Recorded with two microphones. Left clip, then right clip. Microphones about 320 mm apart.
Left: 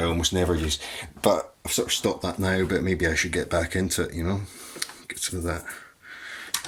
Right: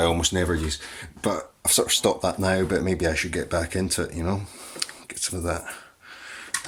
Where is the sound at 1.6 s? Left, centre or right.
Centre.